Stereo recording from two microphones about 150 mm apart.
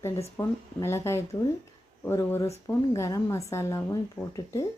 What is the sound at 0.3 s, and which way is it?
Speech, 20° left (ahead or behind).